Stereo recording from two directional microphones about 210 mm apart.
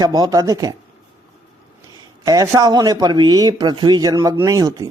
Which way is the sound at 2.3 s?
15° right (ahead or behind).